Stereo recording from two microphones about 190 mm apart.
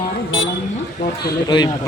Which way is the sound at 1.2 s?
20° left (ahead or behind).